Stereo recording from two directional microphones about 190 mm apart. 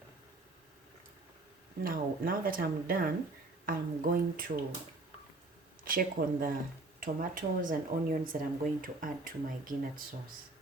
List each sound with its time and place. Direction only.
1.8 s speech: 50° right (ahead or behind)
5.8 s speech: 50° right (ahead or behind)